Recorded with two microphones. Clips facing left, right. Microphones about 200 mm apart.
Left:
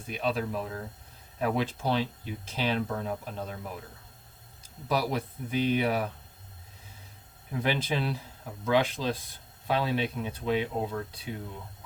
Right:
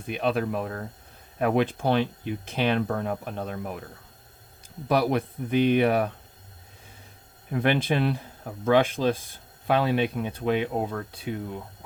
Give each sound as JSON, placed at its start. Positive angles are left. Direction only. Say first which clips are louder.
{"t": 0.1, "sound": "speech", "louder": "right 4 dB", "side_deg": -60}
{"t": 4.9, "sound": "speech", "louder": "right 6 dB", "side_deg": -55}
{"t": 7.5, "sound": "speech", "louder": "right 5 dB", "side_deg": -60}